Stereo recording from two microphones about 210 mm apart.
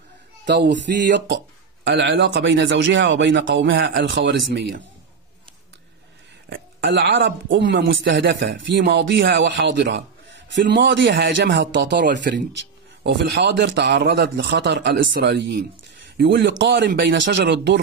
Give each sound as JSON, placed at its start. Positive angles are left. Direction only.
{"t": 0.9, "sound": "speech", "side_deg": -50}
{"t": 6.5, "sound": "speech", "side_deg": -55}